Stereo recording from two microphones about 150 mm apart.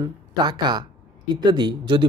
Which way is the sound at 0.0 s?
30° right (ahead or behind).